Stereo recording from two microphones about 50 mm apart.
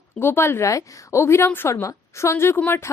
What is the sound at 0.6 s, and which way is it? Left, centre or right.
Speech, left.